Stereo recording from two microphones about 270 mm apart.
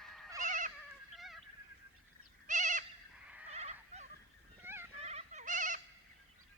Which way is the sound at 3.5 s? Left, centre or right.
Right.